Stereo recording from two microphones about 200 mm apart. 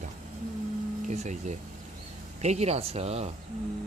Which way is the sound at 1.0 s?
35° right (ahead or behind).